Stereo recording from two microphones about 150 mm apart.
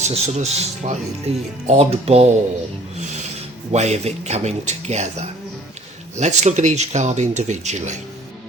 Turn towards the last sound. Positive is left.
turn(degrees=-50)  # may be behind; listen again after turning